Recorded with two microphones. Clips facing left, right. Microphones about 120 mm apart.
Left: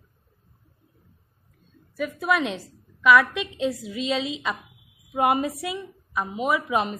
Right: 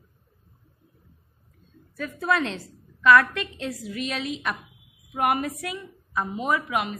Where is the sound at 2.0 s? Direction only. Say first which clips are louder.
Left 1 dB; 15° left (ahead or behind); by 7.0 s 30° left (ahead or behind).